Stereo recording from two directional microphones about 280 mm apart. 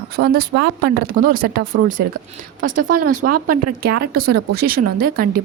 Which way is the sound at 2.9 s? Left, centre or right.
Right.